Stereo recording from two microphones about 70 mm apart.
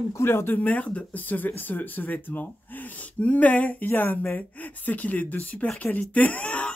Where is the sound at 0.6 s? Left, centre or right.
Centre.